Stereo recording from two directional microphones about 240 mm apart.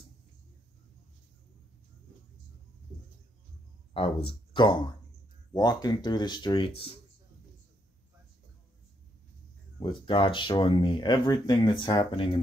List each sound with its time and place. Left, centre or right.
3.9 s speech: left
9.8 s speech: centre